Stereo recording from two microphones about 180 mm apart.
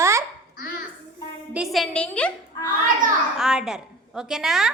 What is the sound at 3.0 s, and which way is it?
Speech, 50° right (ahead or behind).